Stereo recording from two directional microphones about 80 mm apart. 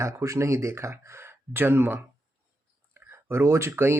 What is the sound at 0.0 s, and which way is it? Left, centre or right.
Speech, right.